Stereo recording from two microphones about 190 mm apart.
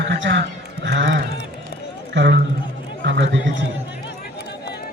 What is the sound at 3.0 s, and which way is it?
Chatter, 70° right (ahead or behind).